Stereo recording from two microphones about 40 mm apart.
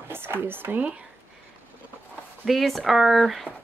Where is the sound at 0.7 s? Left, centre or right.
Right.